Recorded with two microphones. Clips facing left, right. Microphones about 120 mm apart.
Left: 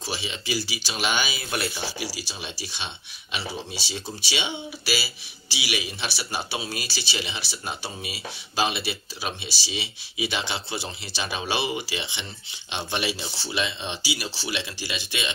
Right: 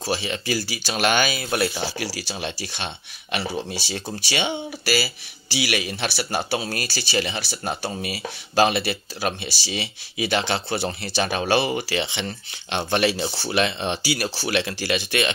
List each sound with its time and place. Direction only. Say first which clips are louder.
0.0 s speech: right 7 dB; 50° right (ahead or behind)